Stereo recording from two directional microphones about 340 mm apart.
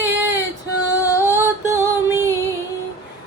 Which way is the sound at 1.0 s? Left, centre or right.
Centre.